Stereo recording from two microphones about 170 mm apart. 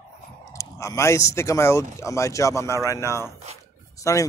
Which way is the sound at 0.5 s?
20° left (ahead or behind).